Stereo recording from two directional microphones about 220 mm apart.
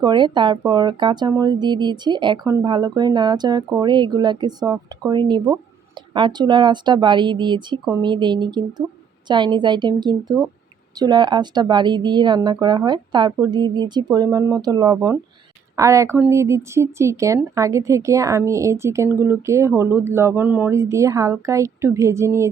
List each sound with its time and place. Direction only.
0.0 s a woman's voice: 20° right (ahead or behind)